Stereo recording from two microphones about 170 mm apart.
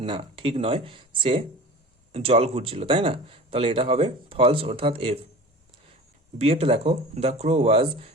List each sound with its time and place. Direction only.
0.0 s speech: 30° right (ahead or behind)
6.4 s speech: 35° right (ahead or behind)